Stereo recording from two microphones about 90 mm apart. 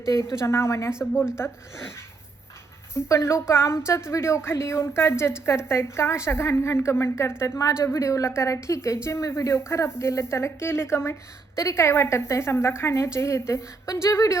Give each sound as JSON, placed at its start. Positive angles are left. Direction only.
{"t": 0.2, "sound": "a woman's voice", "side_deg": 30}
{"t": 2.9, "sound": "a woman's voice", "side_deg": 30}